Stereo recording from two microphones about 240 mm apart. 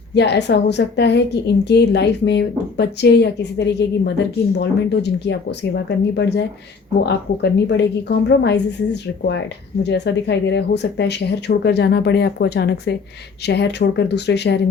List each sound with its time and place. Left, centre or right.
0.1 s speech: left